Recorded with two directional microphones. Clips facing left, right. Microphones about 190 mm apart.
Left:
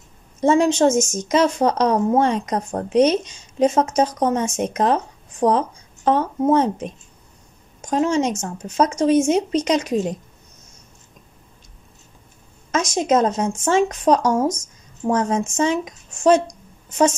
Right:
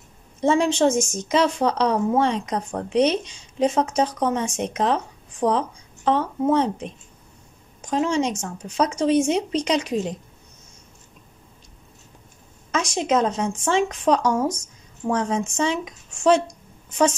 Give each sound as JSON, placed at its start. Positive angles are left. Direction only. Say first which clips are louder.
{"t": 0.4, "sound": "a woman's voice", "louder": "left 3 dB", "side_deg": 45}
{"t": 12.7, "sound": "a woman's voice", "louder": "left 3 dB", "side_deg": 45}